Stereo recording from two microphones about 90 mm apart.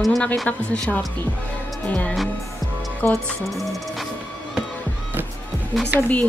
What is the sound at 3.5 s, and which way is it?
Music, centre (ahead or behind).